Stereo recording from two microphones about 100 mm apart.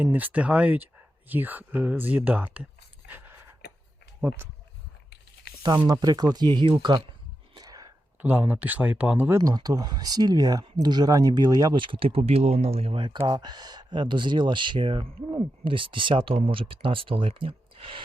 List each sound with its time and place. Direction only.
0.0 s speech: 15° right (ahead or behind)
3.1 s a sound: 20° right (ahead or behind)
5.8 s speech: 40° right (ahead or behind)
7.5 s whispering: 40° right (ahead or behind)
8.2 s speech: 20° right (ahead or behind)
9.4 s speech: 35° right (ahead or behind); by 13.0 s 90° right
13.0 s speech: 60° right (ahead or behind)